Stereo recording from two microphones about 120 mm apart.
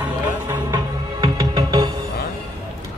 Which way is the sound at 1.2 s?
35° right (ahead or behind).